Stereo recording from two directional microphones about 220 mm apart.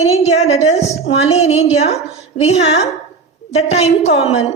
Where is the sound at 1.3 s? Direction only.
30° left (ahead or behind).